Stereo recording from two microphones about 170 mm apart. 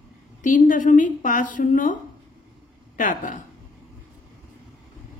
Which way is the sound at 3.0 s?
50° left (ahead or behind).